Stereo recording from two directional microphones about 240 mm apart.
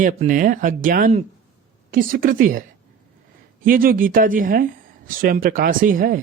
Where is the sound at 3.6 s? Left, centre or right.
Right.